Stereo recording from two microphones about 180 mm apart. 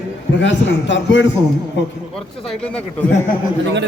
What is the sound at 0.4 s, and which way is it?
A man's voice, 90° left.